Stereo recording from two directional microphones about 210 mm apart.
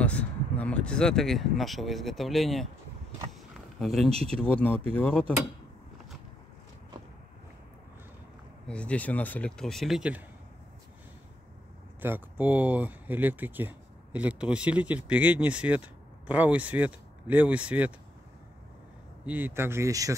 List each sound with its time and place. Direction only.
0.0 s speech: 5° left (ahead or behind)
3.5 s a sound: centre (ahead or behind)
4.1 s speech: 30° right (ahead or behind)
4.4 s speech: 5° left (ahead or behind)
8.6 s speech: 5° left (ahead or behind)
12.0 s speech: 10° right (ahead or behind)
19.2 s speech: 10° right (ahead or behind)